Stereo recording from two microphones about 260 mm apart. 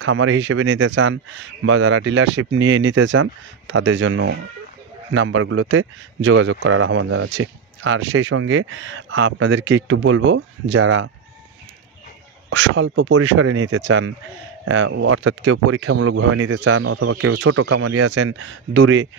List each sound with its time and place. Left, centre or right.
0.0 s a man's voice: right
12.5 s a man's voice: right